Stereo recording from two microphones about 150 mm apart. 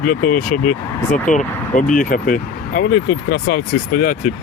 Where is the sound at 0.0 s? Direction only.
70° left (ahead or behind).